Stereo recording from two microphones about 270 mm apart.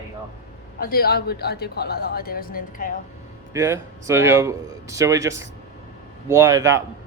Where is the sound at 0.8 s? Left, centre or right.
Left.